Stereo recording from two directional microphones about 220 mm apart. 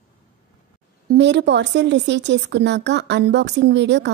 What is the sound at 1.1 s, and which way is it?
A woman's voice, 50° right (ahead or behind).